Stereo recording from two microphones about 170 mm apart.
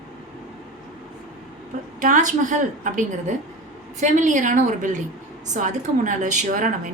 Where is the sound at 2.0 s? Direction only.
50° right (ahead or behind).